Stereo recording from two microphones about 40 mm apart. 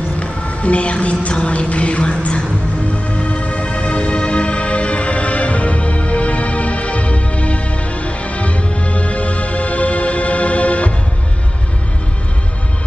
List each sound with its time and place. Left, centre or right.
0.2 s speech: left
3.2 s music: left